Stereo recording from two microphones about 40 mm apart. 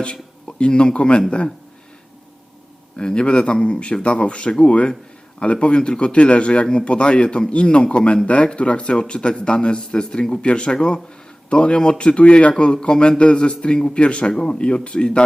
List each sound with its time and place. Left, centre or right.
0.0 s a man's voice: left
3.0 s a man's voice: left